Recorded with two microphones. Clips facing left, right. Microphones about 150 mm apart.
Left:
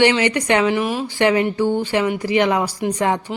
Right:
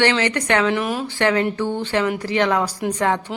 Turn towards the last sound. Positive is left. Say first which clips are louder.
# left 1 dB
turn(degrees=15)  # may be behind; listen again after turning